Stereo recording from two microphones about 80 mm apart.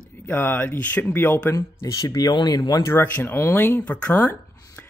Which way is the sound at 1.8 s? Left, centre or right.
Left.